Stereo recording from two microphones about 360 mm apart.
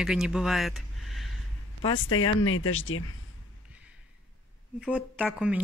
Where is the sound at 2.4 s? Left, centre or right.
Left.